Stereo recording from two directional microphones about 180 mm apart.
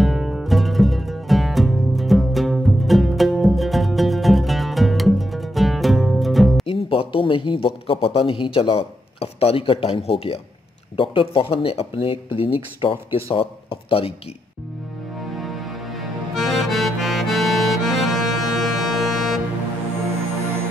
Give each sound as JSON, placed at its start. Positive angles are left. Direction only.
{"t": 0.0, "sound": "music", "side_deg": 0}
{"t": 6.7, "sound": "speech", "side_deg": 30}
{"t": 15.1, "sound": "music", "side_deg": 0}
{"t": 16.3, "sound": "accordion", "side_deg": 0}